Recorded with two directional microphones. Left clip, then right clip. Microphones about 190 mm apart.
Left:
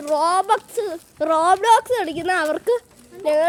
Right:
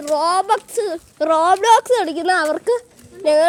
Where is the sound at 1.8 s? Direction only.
25° right (ahead or behind).